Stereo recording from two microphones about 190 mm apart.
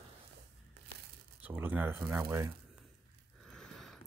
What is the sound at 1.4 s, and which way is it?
Speech, 10° right (ahead or behind).